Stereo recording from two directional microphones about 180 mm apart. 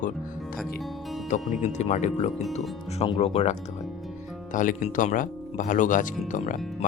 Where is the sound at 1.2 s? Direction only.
40° left (ahead or behind).